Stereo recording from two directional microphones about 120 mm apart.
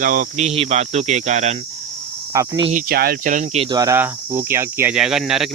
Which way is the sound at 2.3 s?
30° right (ahead or behind).